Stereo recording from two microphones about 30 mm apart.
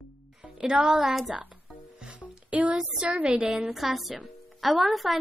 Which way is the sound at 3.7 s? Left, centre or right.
Centre.